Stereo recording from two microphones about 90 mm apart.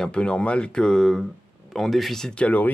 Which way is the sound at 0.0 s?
10° left (ahead or behind).